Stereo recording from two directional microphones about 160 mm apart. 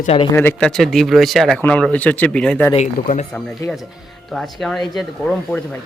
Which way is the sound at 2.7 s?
45° left (ahead or behind).